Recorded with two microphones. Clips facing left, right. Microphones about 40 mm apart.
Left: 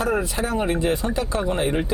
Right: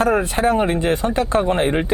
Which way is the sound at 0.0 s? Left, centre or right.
Right.